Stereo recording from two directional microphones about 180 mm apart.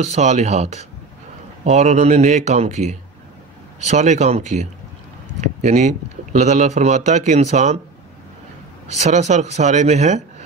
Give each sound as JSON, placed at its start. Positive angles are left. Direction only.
{"t": 0.0, "sound": "speech", "side_deg": -40}
{"t": 8.9, "sound": "speech", "side_deg": -40}